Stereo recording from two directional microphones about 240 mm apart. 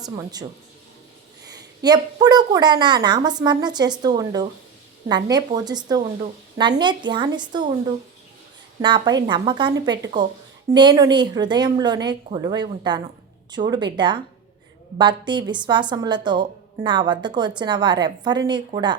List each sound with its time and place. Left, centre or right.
0.0 s a woman's voice: centre
1.5 s a woman's voice: centre
8.8 s a woman's voice: centre